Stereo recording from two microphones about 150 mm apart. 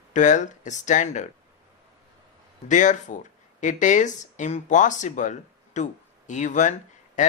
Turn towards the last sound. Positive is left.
turn(degrees=55)  # may be behind; listen again after turning